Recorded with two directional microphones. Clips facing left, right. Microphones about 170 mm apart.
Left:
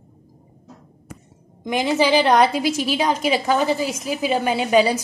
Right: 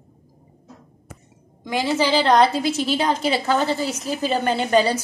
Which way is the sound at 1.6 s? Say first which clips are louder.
Left 2 dB; 20° left (ahead or behind).